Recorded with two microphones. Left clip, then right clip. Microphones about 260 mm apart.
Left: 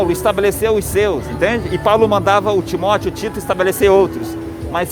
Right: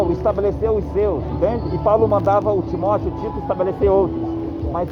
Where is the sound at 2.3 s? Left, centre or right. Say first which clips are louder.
Left 3 dB; left.